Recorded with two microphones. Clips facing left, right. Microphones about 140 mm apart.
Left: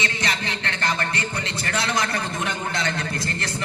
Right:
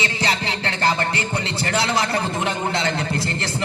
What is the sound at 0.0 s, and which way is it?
Music, 30° right (ahead or behind).